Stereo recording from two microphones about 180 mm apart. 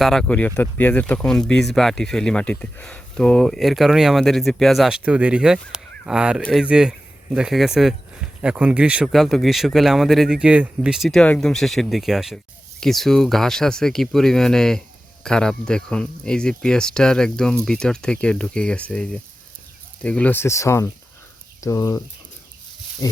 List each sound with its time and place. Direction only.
0.0 s speech: centre (ahead or behind); by 22.0 s 20° left (ahead or behind)